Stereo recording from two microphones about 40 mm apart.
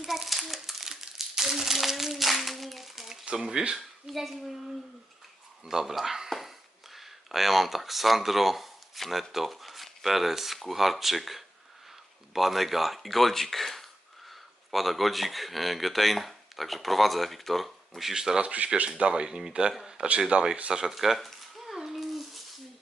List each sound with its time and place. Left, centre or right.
0.0 s crumpling: centre
3.8 s speech: centre
5.6 s speech: centre
18.1 s speech: centre
18.4 s speech: right; by 20.9 s centre
20.9 s speech: centre
21.8 s a sound: centre